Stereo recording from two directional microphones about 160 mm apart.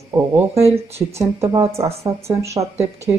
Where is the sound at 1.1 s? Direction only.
20° right (ahead or behind).